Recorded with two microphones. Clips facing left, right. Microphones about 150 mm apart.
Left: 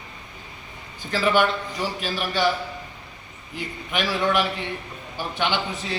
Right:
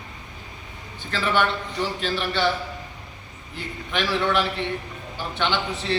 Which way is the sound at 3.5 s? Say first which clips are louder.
Even; 10° left (ahead or behind).